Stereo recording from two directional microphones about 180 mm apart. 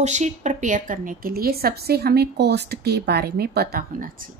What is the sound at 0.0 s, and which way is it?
A woman's voice, 40° right (ahead or behind).